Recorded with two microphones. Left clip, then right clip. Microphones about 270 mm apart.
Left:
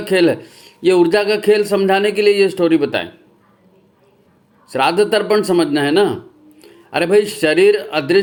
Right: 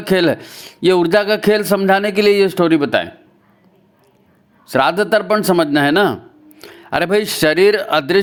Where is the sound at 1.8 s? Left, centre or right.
Right.